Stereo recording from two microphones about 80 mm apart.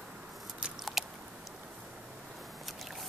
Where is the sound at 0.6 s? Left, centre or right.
Centre.